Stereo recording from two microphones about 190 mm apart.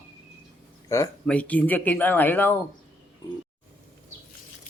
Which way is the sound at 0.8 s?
15° left (ahead or behind).